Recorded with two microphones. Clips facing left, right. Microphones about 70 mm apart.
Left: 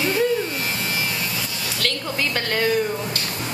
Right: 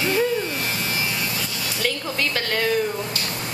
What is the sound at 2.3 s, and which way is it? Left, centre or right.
Speech, centre.